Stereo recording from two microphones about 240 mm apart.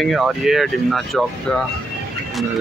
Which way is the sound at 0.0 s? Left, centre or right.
Centre.